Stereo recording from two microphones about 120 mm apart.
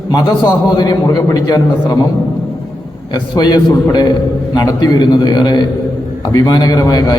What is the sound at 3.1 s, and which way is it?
Speech, 40° left (ahead or behind).